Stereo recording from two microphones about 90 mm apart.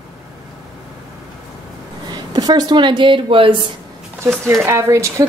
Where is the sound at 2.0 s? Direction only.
55° right (ahead or behind); by 3.6 s 75° right (ahead or behind).